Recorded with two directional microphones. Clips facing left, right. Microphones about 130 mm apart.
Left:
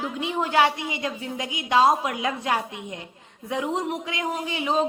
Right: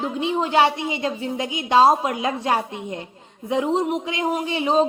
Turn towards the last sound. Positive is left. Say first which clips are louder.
# right 5 dB
turn(degrees=-30)  # may be behind; listen again after turning